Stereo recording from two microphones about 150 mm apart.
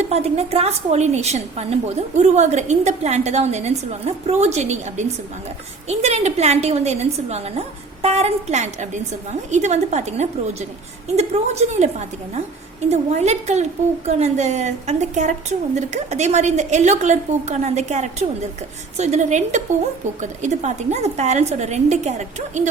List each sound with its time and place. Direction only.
0.0 s a woman's voice: 45° right (ahead or behind)